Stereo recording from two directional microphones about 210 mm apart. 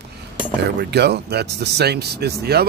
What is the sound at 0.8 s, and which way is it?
Speech, 50° right (ahead or behind).